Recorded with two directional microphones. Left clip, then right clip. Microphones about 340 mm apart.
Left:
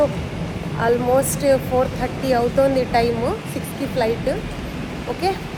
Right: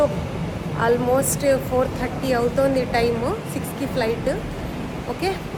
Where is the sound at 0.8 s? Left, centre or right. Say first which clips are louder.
Left 2 dB; centre.